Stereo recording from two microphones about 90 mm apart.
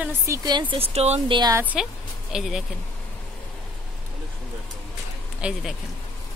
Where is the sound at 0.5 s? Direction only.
60° right (ahead or behind); by 1.4 s 80° right.